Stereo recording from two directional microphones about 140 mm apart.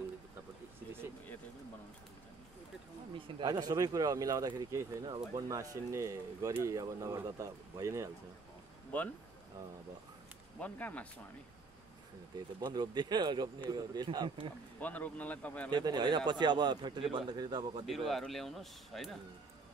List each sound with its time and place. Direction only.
3.3 s a man's voice: 30° right (ahead or behind)
8.9 s speech: 10° left (ahead or behind)
10.6 s speech: 10° left (ahead or behind)
12.5 s a man's voice: 30° right (ahead or behind)
14.8 s speech: 10° left (ahead or behind)
15.7 s speech: 30° right (ahead or behind)
17.8 s speech: centre (ahead or behind)